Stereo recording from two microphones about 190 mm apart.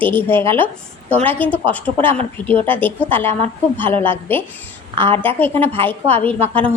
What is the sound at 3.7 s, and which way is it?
Speech, 10° left (ahead or behind).